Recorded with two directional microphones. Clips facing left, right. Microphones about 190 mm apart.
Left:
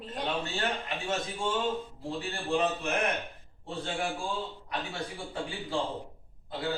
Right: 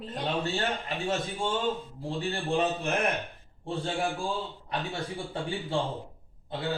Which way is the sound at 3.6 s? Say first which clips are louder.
Right 4 dB; 30° right (ahead or behind).